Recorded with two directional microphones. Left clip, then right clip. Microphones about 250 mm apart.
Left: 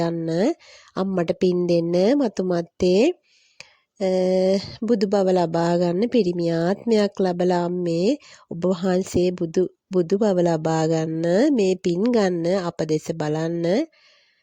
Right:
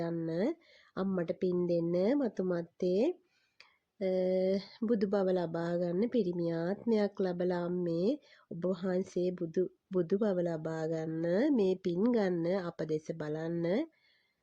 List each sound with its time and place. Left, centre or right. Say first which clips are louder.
0.0 s speech: left 12 dB; left